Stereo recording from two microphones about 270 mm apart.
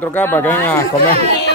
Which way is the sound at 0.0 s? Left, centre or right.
Centre.